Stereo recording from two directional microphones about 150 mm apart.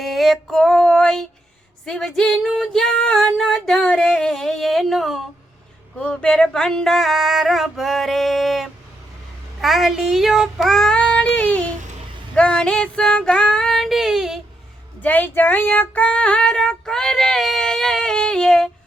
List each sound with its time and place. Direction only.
0.0 s female singing: centre (ahead or behind)
1.8 s a sound: centre (ahead or behind)
9.6 s child singing: centre (ahead or behind)
12.3 s female singing: 5° left (ahead or behind)
15.0 s female singing: 10° left (ahead or behind)